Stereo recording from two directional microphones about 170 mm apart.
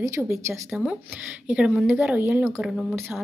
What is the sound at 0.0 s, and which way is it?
Speech, 15° right (ahead or behind).